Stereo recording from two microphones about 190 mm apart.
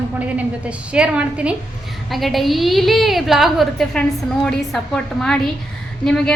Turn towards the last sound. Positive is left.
turn(degrees=5)  # may be behind; listen again after turning